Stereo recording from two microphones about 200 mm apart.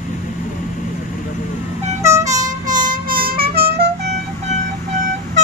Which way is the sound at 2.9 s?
45° right (ahead or behind).